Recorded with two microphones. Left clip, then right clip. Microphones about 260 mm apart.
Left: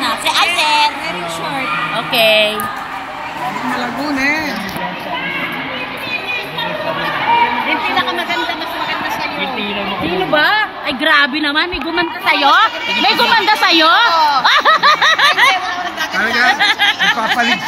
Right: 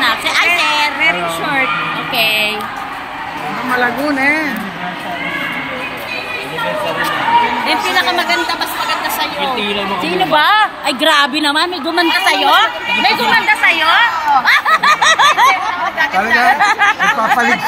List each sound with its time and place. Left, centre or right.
0.0 s a sound: centre
2.1 s music: centre
10.3 s a woman's voice: centre
12.4 s a woman's voice: centre